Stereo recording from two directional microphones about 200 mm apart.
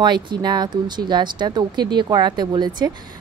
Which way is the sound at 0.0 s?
20° right (ahead or behind).